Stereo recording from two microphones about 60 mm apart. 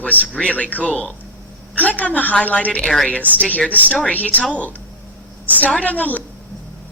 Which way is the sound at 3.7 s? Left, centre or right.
Left.